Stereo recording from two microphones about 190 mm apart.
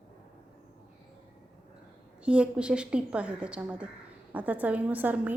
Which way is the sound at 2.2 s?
5° right (ahead or behind).